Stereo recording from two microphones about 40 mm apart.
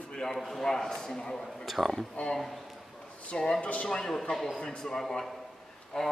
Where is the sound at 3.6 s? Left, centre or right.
Left.